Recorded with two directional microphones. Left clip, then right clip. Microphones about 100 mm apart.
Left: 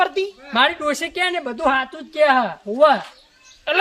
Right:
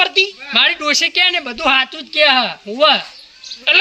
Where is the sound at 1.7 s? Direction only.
30° left (ahead or behind).